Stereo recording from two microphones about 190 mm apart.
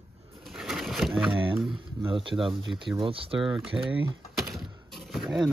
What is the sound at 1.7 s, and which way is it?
Speech, 25° right (ahead or behind).